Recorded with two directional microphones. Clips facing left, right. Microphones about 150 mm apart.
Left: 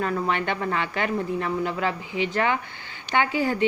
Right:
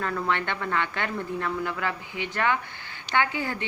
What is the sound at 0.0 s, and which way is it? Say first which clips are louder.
A woman's voice: left 3 dB; 20° left (ahead or behind).